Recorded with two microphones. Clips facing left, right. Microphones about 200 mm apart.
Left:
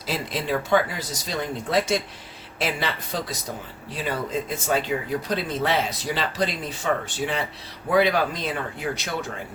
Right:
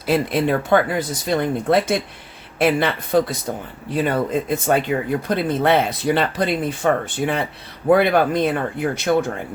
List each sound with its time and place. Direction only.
0.0 s speech: 60° right (ahead or behind)